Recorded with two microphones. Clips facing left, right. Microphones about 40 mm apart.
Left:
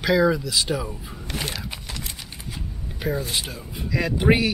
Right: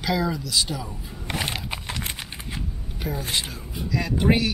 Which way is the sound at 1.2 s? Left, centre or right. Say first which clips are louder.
Right 2 dB; right.